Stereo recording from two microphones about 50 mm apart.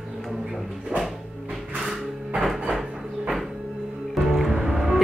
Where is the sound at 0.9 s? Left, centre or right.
Right.